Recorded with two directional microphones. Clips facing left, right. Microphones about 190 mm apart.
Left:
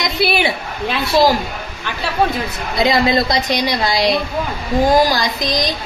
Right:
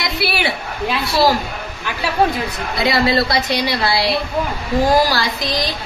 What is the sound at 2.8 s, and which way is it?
A woman's voice, 20° left (ahead or behind).